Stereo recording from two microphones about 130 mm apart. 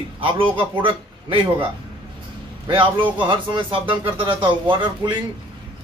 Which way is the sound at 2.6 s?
40° right (ahead or behind).